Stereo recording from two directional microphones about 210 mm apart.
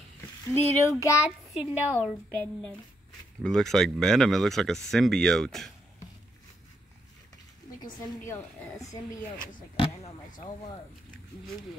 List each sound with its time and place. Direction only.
0.6 s a woman's voice: 10° left (ahead or behind)
1.5 s a woman's voice: 5° right (ahead or behind)
2.3 s a woman's voice: 10° left (ahead or behind)
7.8 s a woman's voice: 10° left (ahead or behind)
9.8 s speech: 25° left (ahead or behind)